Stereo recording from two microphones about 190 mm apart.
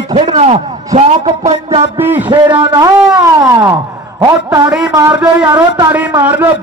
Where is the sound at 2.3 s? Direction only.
20° right (ahead or behind).